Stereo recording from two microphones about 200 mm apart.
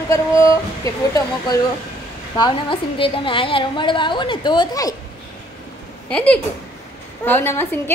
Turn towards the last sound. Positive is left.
turn(degrees=10)  # may be behind; listen again after turning